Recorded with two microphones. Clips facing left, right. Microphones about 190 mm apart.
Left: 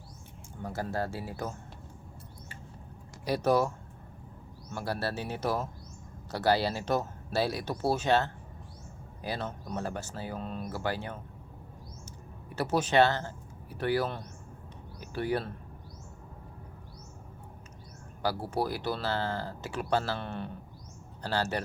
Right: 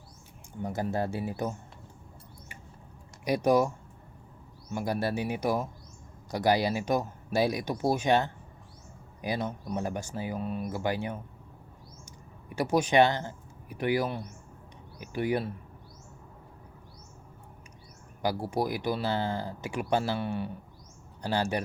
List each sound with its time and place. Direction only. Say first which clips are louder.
0.6 s speech: right 3 dB; 20° right (ahead or behind)
3.2 s speech: right 2 dB; 15° right (ahead or behind)
4.7 s speech: right 4 dB; 15° right (ahead or behind)
12.5 s speech: right 2 dB; 15° right (ahead or behind)
18.2 s speech: right 2 dB; 15° right (ahead or behind)